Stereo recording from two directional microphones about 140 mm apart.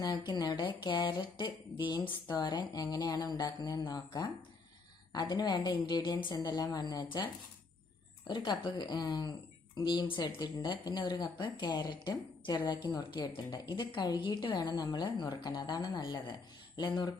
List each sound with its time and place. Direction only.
0.3 s a woman's voice: 30° left (ahead or behind)
8.3 s speech: 35° left (ahead or behind)